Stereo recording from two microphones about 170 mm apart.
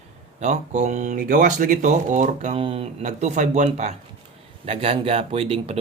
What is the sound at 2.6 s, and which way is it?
Speech, 30° right (ahead or behind).